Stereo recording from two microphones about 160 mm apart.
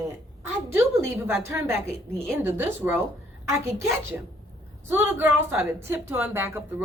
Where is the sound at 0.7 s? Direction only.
15° right (ahead or behind).